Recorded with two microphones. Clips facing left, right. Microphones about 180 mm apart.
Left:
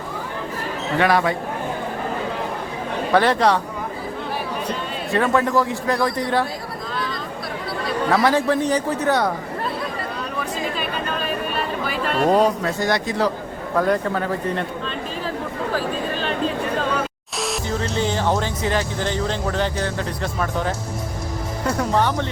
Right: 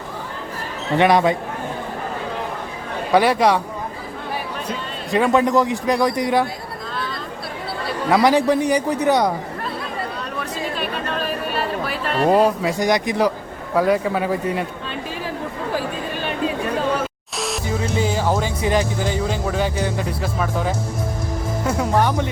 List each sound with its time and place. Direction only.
0.9 s speech: 20° right (ahead or behind)
3.1 s a man's voice: 10° right (ahead or behind)
4.7 s a man's voice: 15° right (ahead or behind)
8.1 s a man's voice: 15° right (ahead or behind)
10.8 s a sound: centre (ahead or behind)
13.7 s a man's voice: 5° right (ahead or behind)
17.3 s music: centre (ahead or behind)
17.7 s a man's voice: 10° right (ahead or behind)